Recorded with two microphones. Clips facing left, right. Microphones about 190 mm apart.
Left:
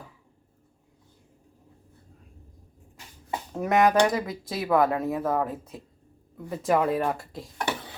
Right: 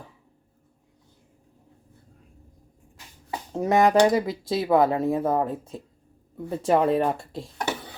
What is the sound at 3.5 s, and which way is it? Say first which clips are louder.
Speech: right 2 dB; 25° right (ahead or behind).